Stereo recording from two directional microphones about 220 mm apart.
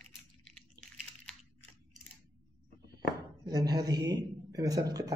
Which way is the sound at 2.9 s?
15° right (ahead or behind).